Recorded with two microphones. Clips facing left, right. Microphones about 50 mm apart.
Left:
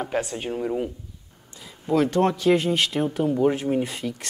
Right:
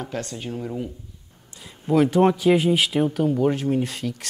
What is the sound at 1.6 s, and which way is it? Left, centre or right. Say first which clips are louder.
Speech: right 2 dB; centre.